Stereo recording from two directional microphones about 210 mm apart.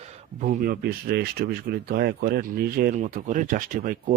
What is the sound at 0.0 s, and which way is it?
Speech, 30° right (ahead or behind).